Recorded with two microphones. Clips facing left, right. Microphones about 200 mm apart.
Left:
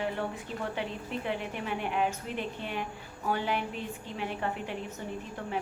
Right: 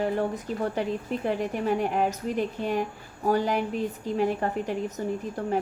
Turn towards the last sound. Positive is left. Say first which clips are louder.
# right 7 dB
turn(degrees=-40)  # may be behind; listen again after turning